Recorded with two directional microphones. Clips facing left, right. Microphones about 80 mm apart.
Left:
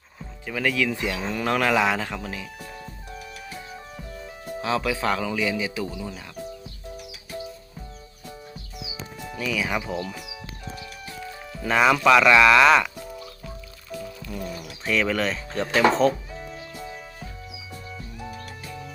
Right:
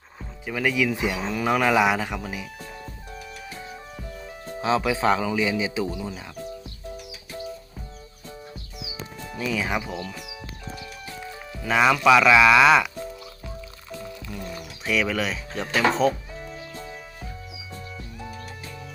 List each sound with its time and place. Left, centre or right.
0.4 s speech: centre
4.6 s a man's voice: right
9.4 s a man's voice: right
9.8 s speech: centre
11.6 s speech: centre
14.8 s speech: centre
18.3 s music: centre